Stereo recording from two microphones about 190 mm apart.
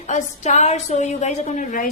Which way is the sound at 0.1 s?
40° left (ahead or behind).